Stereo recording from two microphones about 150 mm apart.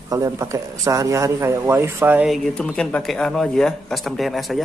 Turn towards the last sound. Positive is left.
turn(degrees=0)  # may be behind; listen again after turning